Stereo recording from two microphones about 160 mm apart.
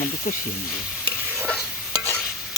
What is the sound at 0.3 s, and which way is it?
Speech, 60° left (ahead or behind).